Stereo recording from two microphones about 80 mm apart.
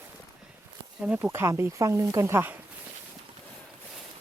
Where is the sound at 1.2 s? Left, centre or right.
Right.